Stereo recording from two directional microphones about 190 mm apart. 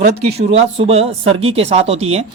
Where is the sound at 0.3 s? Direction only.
35° right (ahead or behind).